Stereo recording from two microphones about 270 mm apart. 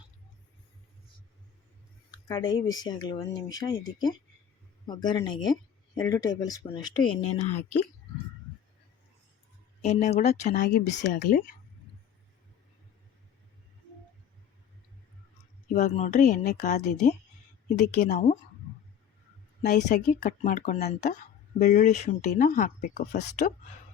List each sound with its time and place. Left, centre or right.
2.0 s speech: centre
9.8 s speech: left
15.7 s speech: left
19.6 s speech: left